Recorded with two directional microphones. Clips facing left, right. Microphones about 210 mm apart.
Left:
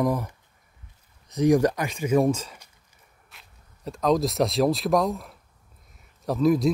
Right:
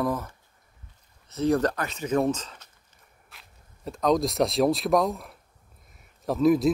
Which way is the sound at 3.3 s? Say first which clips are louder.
Right 1 dB; centre (ahead or behind).